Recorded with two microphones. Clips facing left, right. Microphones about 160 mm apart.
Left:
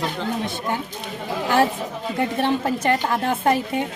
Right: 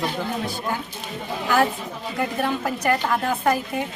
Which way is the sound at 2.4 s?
30° left (ahead or behind).